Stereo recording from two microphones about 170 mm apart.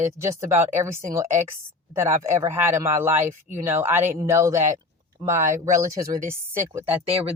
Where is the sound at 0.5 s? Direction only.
15° right (ahead or behind).